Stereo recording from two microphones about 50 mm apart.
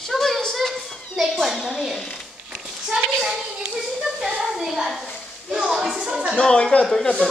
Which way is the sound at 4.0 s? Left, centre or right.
Centre.